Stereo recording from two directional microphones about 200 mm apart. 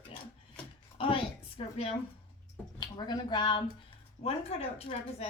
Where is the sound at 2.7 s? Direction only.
20° left (ahead or behind).